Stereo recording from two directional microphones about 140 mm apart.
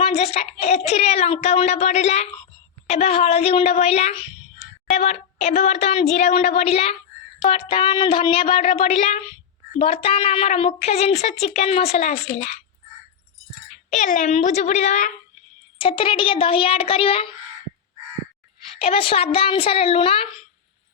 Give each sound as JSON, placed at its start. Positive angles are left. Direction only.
{"t": 0.0, "sound": "a woman's voice", "side_deg": 50}
{"t": 13.9, "sound": "a child's voice", "side_deg": 65}
{"t": 15.8, "sound": "speech", "side_deg": 40}
{"t": 18.8, "sound": "a woman's voice", "side_deg": 45}